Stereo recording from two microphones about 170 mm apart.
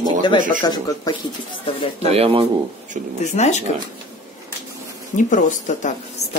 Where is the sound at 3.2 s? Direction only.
40° left (ahead or behind).